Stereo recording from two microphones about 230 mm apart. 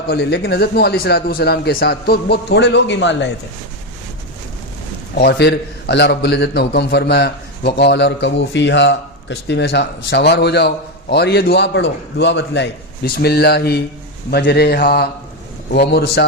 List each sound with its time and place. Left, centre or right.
0.1 s a man's voice: left
5.1 s a man's voice: left